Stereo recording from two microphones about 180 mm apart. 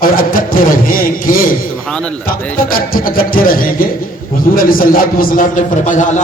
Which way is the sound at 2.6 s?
50° left (ahead or behind).